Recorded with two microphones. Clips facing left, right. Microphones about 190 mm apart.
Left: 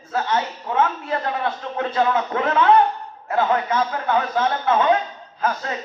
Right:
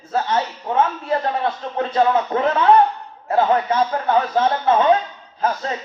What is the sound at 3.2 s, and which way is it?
Speech, 30° right (ahead or behind).